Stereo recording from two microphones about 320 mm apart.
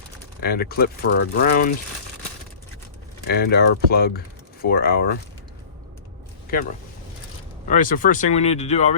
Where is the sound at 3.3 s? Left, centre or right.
Left.